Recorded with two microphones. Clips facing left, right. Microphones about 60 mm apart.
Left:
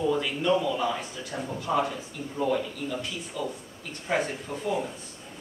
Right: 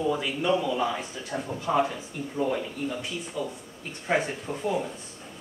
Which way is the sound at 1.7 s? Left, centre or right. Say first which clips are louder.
Right 2 dB; right.